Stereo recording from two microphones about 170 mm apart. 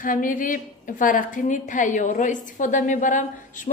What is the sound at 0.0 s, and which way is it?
A woman's voice, 50° left (ahead or behind).